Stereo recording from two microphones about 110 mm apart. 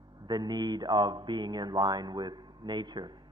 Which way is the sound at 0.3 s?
40° right (ahead or behind).